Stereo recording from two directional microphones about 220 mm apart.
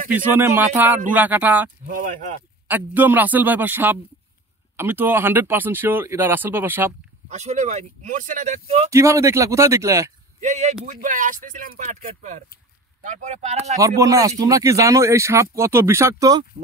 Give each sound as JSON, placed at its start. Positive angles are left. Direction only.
{"t": 0.1, "sound": "speech", "side_deg": -10}
{"t": 1.9, "sound": "speech", "side_deg": -40}
{"t": 2.7, "sound": "speech", "side_deg": -10}
{"t": 7.2, "sound": "speech", "side_deg": -30}
{"t": 8.9, "sound": "speech", "side_deg": -15}
{"t": 10.4, "sound": "speech", "side_deg": -30}
{"t": 13.7, "sound": "speech", "side_deg": -15}